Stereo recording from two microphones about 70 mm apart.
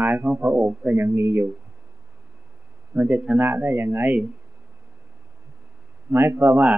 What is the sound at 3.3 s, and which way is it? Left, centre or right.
Speech, right.